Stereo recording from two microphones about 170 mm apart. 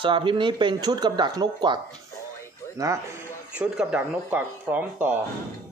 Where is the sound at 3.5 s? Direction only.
5° right (ahead or behind).